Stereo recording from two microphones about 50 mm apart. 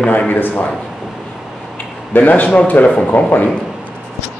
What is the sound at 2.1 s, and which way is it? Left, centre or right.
Speech, left.